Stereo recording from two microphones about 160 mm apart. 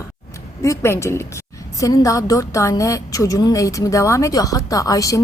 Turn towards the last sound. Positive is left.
turn(degrees=20)  # may be behind; listen again after turning